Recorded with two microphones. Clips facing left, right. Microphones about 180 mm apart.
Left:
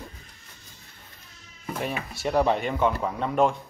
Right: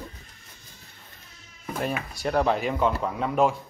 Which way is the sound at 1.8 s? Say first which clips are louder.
Right 2 dB; centre (ahead or behind).